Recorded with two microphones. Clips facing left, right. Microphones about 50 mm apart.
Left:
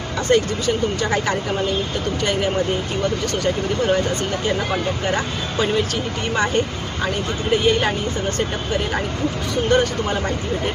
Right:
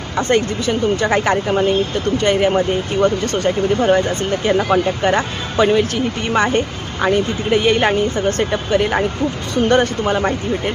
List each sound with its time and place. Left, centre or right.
0.2 s speech: right